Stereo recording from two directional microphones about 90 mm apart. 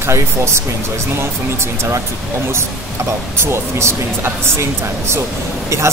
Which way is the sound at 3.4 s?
30° right (ahead or behind).